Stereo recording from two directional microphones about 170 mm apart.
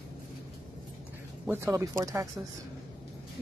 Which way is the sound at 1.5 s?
15° right (ahead or behind).